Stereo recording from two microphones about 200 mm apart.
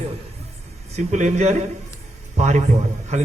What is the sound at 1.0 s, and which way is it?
A man's voice, 35° right (ahead or behind).